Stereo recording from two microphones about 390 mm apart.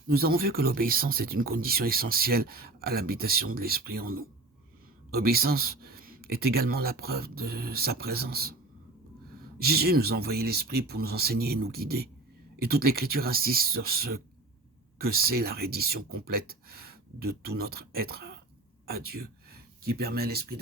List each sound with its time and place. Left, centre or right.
0.1 s speech: right